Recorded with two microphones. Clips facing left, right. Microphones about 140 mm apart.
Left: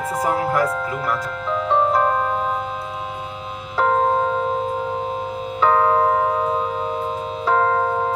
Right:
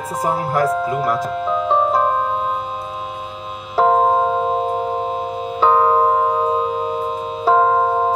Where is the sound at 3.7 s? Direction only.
30° right (ahead or behind).